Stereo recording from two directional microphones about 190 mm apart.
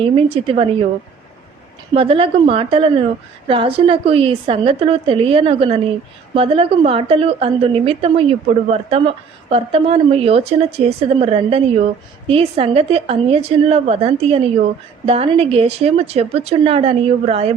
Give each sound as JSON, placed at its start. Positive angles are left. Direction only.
{"t": 0.0, "sound": "speech", "side_deg": -30}
{"t": 1.9, "sound": "a woman's voice", "side_deg": -30}